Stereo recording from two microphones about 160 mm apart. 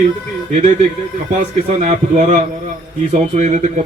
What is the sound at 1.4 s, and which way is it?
A man's voice, 50° right (ahead or behind).